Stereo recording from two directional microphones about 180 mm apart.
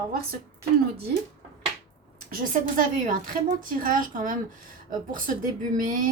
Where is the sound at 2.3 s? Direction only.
50° right (ahead or behind).